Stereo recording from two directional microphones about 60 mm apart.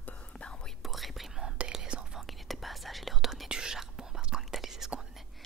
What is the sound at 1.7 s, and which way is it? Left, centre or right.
Whispering, centre.